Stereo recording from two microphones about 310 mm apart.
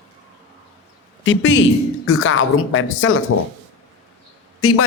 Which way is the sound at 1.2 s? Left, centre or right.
Left.